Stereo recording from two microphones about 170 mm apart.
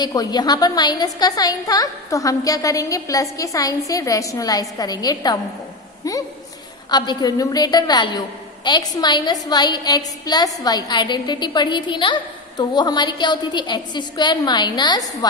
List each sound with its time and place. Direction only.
0.0 s a woman's voice: 25° left (ahead or behind)
6.9 s a woman's voice: 25° left (ahead or behind)